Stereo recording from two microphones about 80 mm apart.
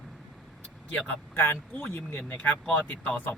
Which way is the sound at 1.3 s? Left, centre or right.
Left.